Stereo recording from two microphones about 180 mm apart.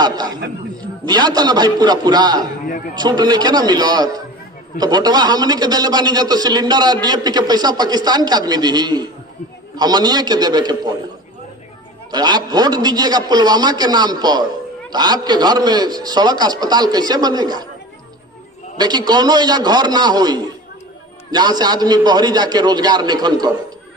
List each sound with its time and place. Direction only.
0.0 s a man's voice: 20° right (ahead or behind)
2.6 s a man's voice: 50° left (ahead or behind)
2.9 s a man's voice: 25° right (ahead or behind)
12.1 s a man's voice: 25° right (ahead or behind)
18.8 s a man's voice: 25° right (ahead or behind)